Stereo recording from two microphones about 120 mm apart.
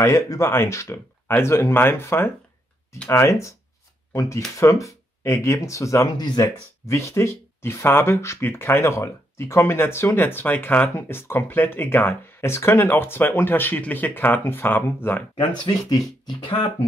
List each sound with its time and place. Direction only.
0.0 s speech: 25° left (ahead or behind)
6.4 s speech: 25° left (ahead or behind)
15.6 s speech: 30° left (ahead or behind)